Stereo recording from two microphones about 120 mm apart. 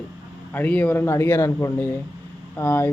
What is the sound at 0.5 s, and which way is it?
A man's voice, 15° left (ahead or behind).